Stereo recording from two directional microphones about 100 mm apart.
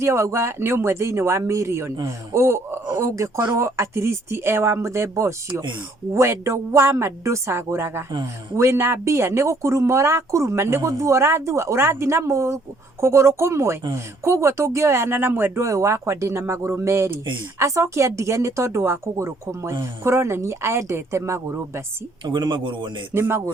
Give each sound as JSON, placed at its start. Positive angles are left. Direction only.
{"t": 0.0, "sound": "speech", "side_deg": -30}
{"t": 22.2, "sound": "speech", "side_deg": -50}